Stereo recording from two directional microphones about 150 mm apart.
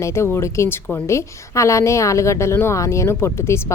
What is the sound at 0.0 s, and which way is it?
Speech, 15° left (ahead or behind).